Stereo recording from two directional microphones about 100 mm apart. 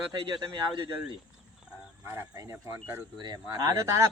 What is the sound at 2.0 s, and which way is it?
Speech, 30° right (ahead or behind).